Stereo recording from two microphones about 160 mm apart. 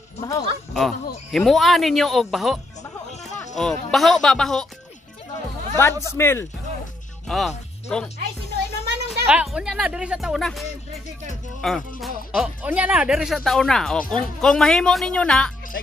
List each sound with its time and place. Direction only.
0.7 s speech: centre (ahead or behind)
5.8 s speech: 15° left (ahead or behind)
7.2 s speech: centre (ahead or behind)
8.8 s a sound: 90° right
9.3 s speech: 5° right (ahead or behind)
11.6 s speech: centre (ahead or behind)